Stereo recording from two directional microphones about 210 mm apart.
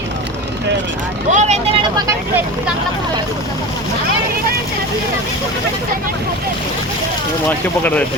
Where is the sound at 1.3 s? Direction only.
35° right (ahead or behind).